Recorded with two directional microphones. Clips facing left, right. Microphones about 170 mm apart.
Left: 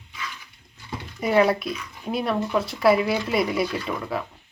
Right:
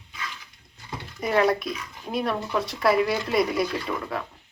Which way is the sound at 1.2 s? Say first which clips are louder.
Left 2 dB; 5° left (ahead or behind).